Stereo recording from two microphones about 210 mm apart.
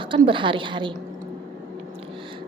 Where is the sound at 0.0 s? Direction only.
25° right (ahead or behind).